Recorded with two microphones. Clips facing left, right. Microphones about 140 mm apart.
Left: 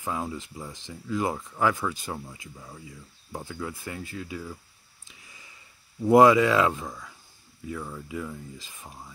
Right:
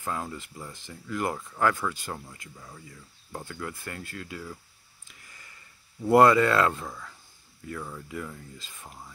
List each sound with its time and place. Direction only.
0.0 s speech: 10° left (ahead or behind)
6.0 s speech: 10° left (ahead or behind)